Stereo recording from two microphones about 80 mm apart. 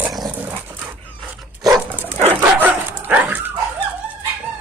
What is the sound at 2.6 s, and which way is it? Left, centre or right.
Dog, right.